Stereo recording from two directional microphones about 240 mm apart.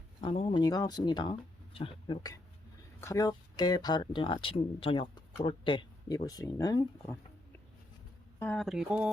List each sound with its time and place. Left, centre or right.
0.2 s speech: left
8.4 s speech: centre